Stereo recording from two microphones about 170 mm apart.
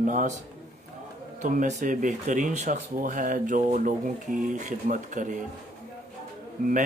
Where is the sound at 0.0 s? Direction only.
50° right (ahead or behind).